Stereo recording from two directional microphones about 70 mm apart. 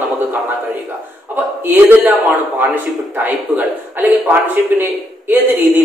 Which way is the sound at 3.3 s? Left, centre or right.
Right.